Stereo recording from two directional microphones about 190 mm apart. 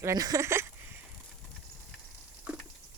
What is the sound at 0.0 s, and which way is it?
Speech, 20° right (ahead or behind).